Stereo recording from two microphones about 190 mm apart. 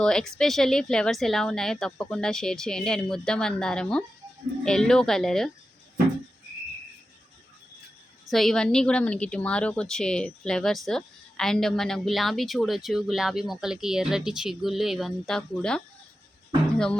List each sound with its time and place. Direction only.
0.0 s a woman's voice: 5° left (ahead or behind)
8.3 s a woman's voice: centre (ahead or behind)